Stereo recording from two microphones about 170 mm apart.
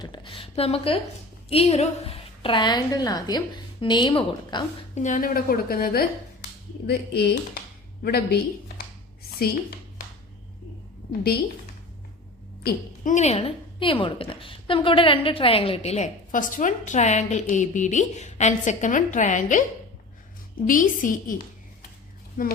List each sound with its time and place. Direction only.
0.0 s a woman's voice: 25° left (ahead or behind)
4.9 s a woman's voice: 50° left (ahead or behind); by 8.4 s 65° left (ahead or behind)
12.6 s a woman's voice: 45° left (ahead or behind)
20.7 s a woman's voice: 50° left (ahead or behind)